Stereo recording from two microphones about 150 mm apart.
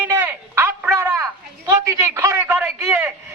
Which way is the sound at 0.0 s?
10° right (ahead or behind).